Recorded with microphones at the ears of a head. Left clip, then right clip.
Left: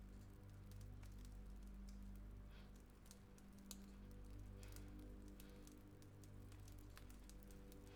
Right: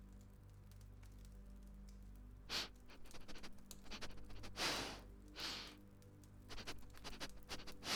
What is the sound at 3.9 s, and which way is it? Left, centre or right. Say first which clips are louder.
Music: right 12 dB; right.